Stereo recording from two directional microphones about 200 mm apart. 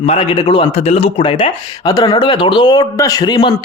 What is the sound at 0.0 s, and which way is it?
Speech, 30° left (ahead or behind).